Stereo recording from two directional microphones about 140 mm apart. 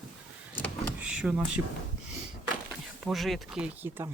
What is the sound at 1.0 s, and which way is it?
Speech, 10° right (ahead or behind).